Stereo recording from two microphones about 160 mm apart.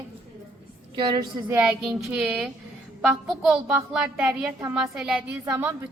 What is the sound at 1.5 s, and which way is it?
Speech, 15° right (ahead or behind).